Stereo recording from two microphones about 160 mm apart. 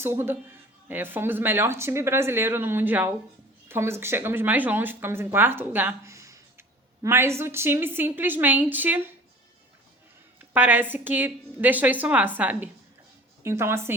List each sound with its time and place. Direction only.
0.0 s speech: 15° right (ahead or behind)
10.5 s speech: 10° right (ahead or behind)